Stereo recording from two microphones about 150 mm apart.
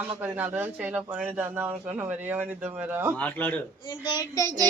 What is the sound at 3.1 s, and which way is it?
Speech, 10° left (ahead or behind).